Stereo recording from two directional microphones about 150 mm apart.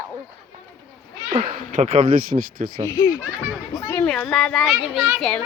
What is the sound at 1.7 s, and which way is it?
Speech, 55° right (ahead or behind).